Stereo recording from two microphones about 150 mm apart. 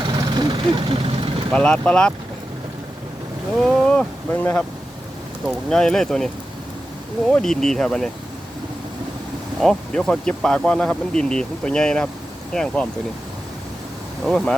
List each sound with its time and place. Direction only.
0.0 s vehicle: 30° right (ahead or behind)
1.5 s speech: 5° left (ahead or behind)
3.6 s speech: 5° left (ahead or behind)
5.5 s speech: 5° left (ahead or behind)
9.6 s speech: centre (ahead or behind)
14.3 s speech: centre (ahead or behind)